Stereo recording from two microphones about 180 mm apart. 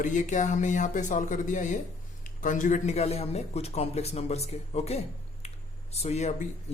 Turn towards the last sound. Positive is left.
turn(degrees=40)  # may be behind; listen again after turning